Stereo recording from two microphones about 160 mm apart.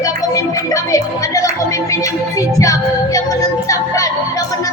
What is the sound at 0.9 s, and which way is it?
Music, 20° left (ahead or behind).